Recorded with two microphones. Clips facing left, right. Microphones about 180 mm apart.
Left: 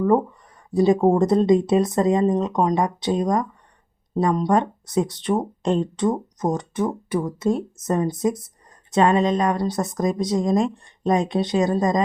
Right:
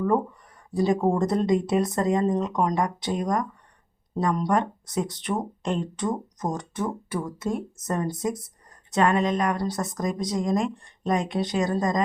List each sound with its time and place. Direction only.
0.7 s speech: 25° left (ahead or behind)